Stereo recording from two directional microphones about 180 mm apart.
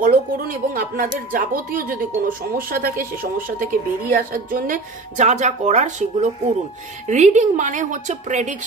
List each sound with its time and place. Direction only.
0.0 s speech: 50° right (ahead or behind)